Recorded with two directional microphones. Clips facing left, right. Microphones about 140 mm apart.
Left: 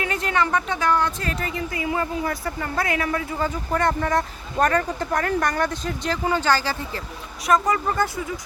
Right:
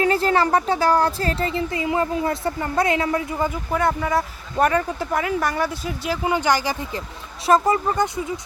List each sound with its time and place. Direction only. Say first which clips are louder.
0.0 s speech: right 5 dB; 35° right (ahead or behind); by 7.0 s 15° right (ahead or behind)
7.4 s speech: right 3 dB; 30° right (ahead or behind)